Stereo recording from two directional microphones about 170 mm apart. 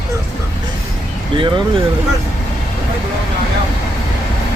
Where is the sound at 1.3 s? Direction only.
30° right (ahead or behind).